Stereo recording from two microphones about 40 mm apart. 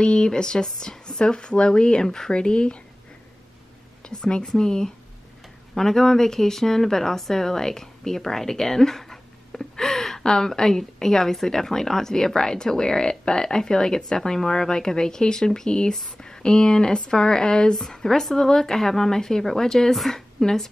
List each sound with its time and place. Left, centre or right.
0.0 s speech: left
4.0 s a woman's voice: left